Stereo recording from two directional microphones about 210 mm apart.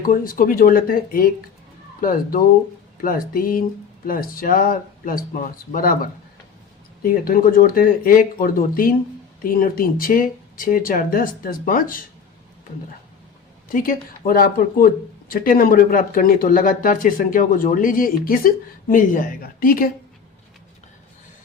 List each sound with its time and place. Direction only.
0.0 s speech: 40° left (ahead or behind)
13.7 s speech: 40° left (ahead or behind)